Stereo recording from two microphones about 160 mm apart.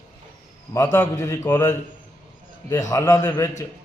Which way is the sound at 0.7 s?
20° left (ahead or behind).